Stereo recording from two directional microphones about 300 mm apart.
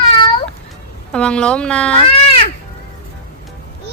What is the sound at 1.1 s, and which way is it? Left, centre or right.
Speech, centre.